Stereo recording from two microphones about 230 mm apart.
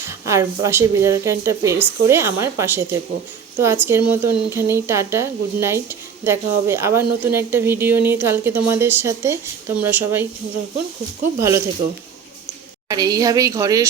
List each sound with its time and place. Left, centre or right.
0.1 s speech: centre
11.3 s speech: centre
12.9 s speech: centre